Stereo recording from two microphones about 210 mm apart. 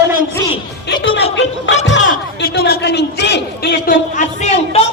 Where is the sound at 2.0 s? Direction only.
40° left (ahead or behind).